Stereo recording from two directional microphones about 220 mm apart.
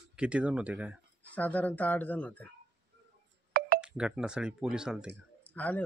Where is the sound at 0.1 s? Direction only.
5° right (ahead or behind).